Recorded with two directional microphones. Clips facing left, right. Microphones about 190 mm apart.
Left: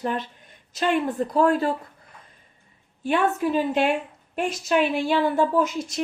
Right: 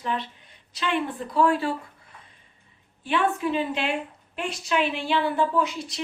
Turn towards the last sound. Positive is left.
turn(degrees=45)  # may be behind; listen again after turning